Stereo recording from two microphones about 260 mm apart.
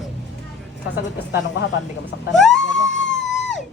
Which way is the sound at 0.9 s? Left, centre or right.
Left.